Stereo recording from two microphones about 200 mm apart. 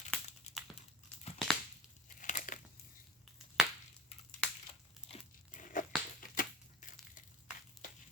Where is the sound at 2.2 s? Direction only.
40° left (ahead or behind).